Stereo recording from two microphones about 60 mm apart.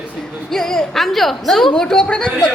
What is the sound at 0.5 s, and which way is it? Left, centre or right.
A woman's voice, centre.